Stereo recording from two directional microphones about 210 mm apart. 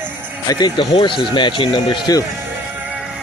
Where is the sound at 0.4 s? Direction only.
20° left (ahead or behind).